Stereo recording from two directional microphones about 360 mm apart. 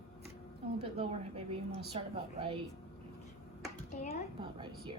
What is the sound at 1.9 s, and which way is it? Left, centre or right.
Speech, centre.